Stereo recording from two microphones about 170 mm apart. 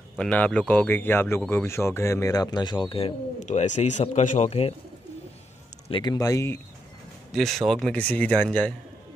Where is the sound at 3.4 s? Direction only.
45° left (ahead or behind).